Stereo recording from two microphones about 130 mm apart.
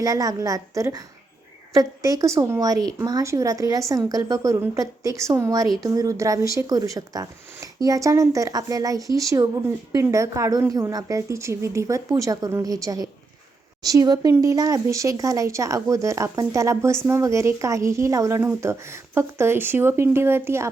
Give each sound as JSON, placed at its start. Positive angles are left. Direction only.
{"t": 0.0, "sound": "a woman's voice", "side_deg": -25}